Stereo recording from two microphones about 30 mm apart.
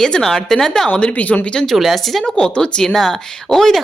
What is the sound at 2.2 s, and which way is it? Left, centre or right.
Speech, left.